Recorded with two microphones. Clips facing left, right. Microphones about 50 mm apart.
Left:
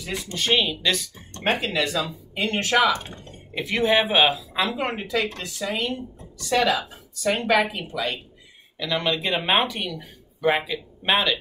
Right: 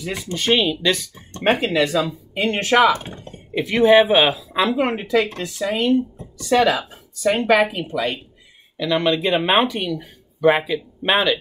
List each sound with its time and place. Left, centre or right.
0.0 s speech: centre
1.3 s speech: right
1.8 s speech: centre
8.7 s speech: centre